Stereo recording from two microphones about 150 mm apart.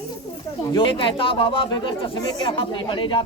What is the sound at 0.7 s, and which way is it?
Speech, 35° left (ahead or behind).